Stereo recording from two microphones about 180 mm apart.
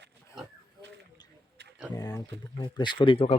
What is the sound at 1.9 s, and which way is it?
Speech, 20° left (ahead or behind).